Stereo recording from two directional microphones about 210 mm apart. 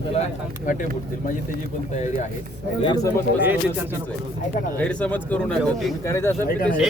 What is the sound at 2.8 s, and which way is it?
Speech, 20° left (ahead or behind).